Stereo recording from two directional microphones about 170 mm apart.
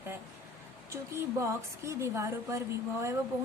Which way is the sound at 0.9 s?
15° right (ahead or behind).